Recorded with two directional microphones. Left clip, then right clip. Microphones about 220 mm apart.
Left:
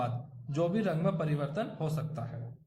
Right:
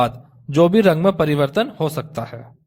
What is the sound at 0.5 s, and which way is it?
A man's voice, 45° right (ahead or behind).